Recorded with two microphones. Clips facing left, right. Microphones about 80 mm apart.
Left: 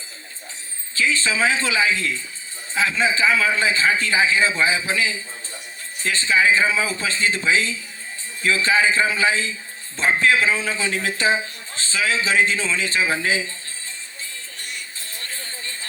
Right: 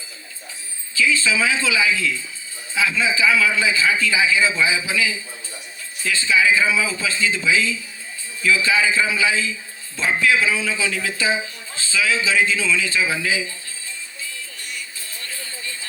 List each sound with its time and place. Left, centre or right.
0.9 s a man's voice: left
14.6 s music: left